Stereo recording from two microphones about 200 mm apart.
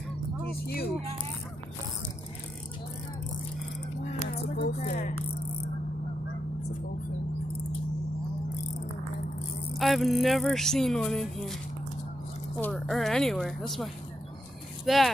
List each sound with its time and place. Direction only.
0.5 s speech: 50° left (ahead or behind)
4.8 s music: 40° left (ahead or behind)
9.8 s speech: centre (ahead or behind)
12.5 s speech: 10° left (ahead or behind)
14.9 s speech: centre (ahead or behind)